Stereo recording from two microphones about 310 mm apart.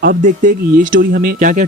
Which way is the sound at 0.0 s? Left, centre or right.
Right.